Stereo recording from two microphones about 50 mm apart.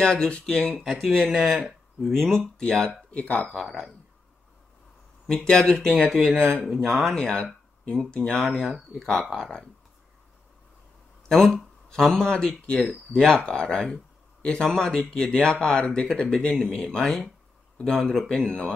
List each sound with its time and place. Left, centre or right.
0.0 s speech: centre
1.0 s speech: centre
2.3 s speech: centre
3.2 s speech: left
5.2 s speech: centre
6.0 s speech: centre
8.0 s speech: left
8.3 s speech: centre
11.2 s speech: centre